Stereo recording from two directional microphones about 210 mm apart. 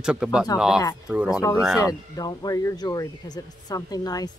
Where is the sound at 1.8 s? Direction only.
15° left (ahead or behind).